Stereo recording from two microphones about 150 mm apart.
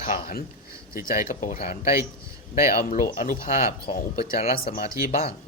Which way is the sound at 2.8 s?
60° left (ahead or behind).